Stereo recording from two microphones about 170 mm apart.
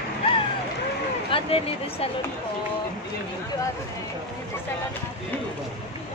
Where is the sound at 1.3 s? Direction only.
35° left (ahead or behind).